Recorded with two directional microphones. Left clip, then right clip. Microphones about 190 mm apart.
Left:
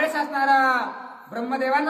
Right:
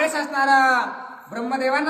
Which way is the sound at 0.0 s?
15° right (ahead or behind).